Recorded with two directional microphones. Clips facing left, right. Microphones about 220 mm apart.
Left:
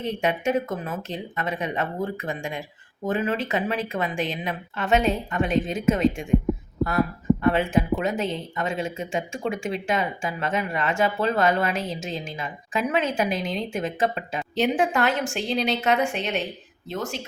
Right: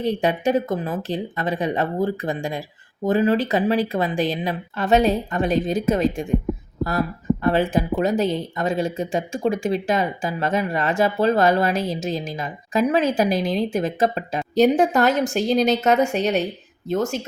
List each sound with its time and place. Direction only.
0.0 s speech: 35° right (ahead or behind)
6.3 s heart sounds: centre (ahead or behind)
7.4 s speech: 35° right (ahead or behind)